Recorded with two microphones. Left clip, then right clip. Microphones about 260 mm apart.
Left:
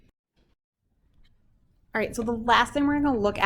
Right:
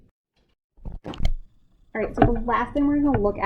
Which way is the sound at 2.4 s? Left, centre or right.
Left.